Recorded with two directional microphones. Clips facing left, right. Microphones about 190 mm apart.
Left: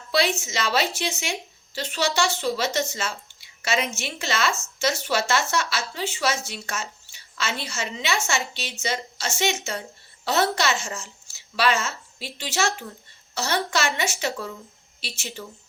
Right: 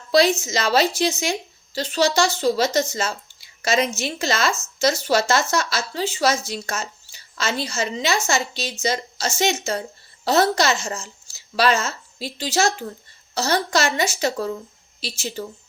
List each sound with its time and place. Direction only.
0.1 s a woman's voice: 40° right (ahead or behind)